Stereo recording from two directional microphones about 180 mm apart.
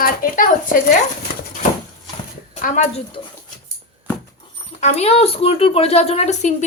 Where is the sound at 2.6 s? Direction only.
45° left (ahead or behind).